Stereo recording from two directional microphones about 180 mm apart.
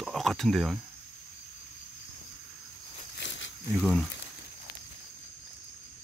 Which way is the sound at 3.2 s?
90° left.